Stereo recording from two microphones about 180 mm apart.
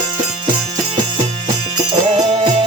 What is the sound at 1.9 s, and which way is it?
Music, 30° right (ahead or behind).